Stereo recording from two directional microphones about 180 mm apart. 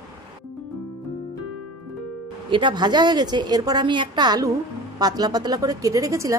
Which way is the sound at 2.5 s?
25° right (ahead or behind).